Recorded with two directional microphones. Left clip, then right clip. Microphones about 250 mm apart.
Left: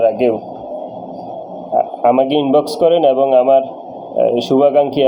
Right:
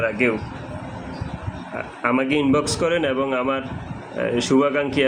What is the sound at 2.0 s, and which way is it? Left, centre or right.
Speech, left.